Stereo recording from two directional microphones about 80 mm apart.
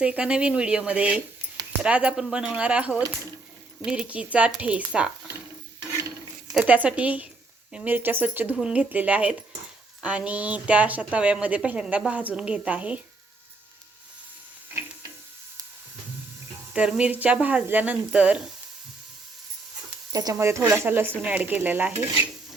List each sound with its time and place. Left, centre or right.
0.0 s a woman's voice: centre
6.5 s a woman's voice: centre
7.9 s stir: right
8.5 s a woman's voice: centre
16.7 s a woman's voice: centre
20.1 s speech: right
20.7 s stir: right